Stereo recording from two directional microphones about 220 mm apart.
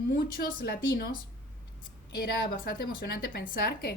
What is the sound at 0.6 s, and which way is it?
Speech, 45° left (ahead or behind).